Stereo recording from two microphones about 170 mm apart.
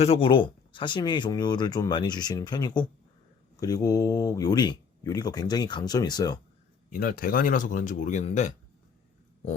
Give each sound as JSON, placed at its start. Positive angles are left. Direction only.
{"t": 0.0, "sound": "speech", "side_deg": 35}
{"t": 6.9, "sound": "a man's voice", "side_deg": 55}